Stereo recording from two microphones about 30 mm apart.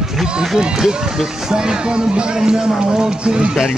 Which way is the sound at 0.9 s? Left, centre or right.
Right.